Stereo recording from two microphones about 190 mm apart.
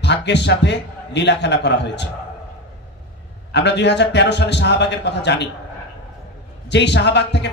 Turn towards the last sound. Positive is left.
turn(degrees=65)  # may be behind; listen again after turning